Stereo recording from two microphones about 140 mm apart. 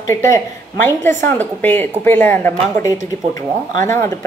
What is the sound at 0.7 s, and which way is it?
A woman's voice, 15° left (ahead or behind).